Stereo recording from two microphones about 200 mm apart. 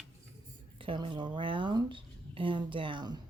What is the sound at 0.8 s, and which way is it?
Speech, 25° right (ahead or behind).